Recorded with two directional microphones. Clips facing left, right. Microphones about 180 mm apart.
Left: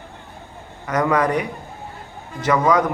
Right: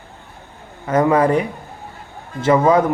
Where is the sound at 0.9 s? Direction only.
25° right (ahead or behind).